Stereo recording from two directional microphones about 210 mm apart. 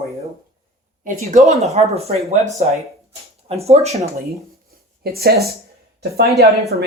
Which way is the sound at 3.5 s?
30° right (ahead or behind).